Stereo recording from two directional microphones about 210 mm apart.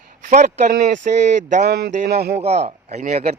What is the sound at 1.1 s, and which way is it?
Speech, 40° right (ahead or behind).